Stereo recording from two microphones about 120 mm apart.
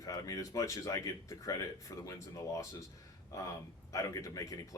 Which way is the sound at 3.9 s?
30° left (ahead or behind).